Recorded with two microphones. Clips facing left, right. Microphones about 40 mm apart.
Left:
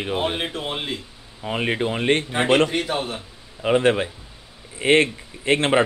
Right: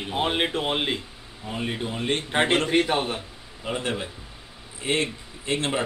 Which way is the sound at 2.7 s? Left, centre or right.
Centre.